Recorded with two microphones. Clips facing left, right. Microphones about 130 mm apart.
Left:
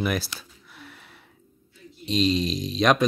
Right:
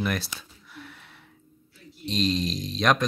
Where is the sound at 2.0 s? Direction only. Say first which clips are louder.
Left 3 dB; centre (ahead or behind).